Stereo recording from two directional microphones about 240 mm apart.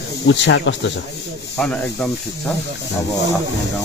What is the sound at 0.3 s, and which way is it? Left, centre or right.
Speech, left.